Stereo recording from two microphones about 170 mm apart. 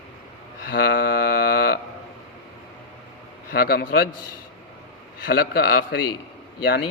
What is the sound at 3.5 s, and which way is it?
Speech, 65° left (ahead or behind).